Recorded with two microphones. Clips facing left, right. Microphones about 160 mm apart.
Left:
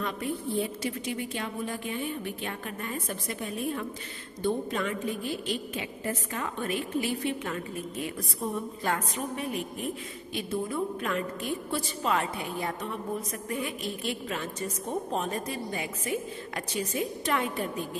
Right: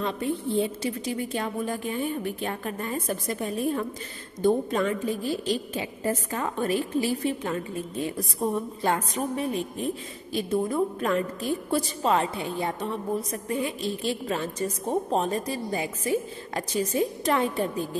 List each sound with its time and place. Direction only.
0.0 s a woman's voice: 25° right (ahead or behind)